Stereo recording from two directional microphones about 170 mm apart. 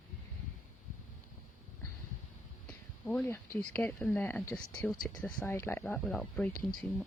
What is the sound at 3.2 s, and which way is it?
Speech, 15° left (ahead or behind).